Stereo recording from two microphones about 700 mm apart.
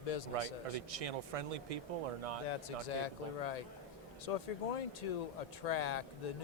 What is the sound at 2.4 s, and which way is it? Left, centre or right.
A man's voice, left.